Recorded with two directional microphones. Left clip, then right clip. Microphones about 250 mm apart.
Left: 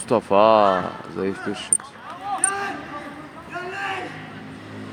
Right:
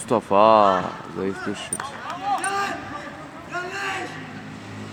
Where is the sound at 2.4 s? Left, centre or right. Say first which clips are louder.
Right 1 dB; right.